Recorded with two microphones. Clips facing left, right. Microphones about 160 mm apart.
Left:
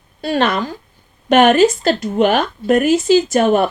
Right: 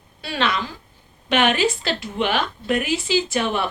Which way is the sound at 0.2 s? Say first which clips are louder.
Left 7 dB; 45° left (ahead or behind).